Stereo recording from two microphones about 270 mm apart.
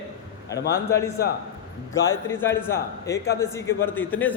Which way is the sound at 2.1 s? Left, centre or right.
Centre.